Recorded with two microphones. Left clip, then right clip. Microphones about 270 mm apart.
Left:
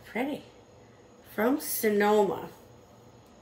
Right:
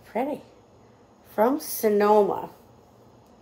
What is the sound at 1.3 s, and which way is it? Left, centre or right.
Speech, centre.